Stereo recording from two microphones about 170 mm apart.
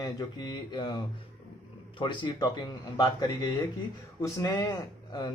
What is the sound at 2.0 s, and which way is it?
Speech, 30° left (ahead or behind).